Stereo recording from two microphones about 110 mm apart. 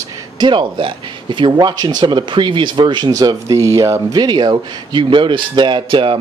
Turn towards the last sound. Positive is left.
turn(degrees=-50)  # may be behind; listen again after turning